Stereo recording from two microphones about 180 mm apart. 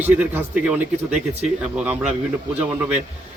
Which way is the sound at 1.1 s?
40° right (ahead or behind).